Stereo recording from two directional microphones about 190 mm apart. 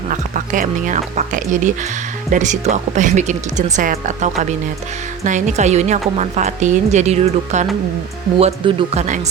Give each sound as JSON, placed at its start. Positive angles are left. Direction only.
{"t": 0.1, "sound": "a woman's voice", "side_deg": -40}